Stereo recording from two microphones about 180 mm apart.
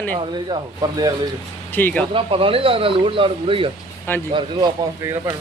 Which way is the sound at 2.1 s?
30° right (ahead or behind).